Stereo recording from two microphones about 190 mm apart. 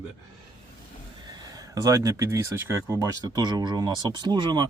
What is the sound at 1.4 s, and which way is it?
Speech, 20° right (ahead or behind).